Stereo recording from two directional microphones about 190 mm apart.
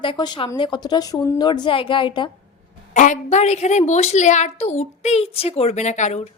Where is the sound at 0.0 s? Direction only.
25° left (ahead or behind).